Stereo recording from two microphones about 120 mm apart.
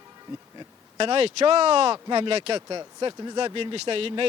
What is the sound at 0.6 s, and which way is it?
Speech, 45° right (ahead or behind).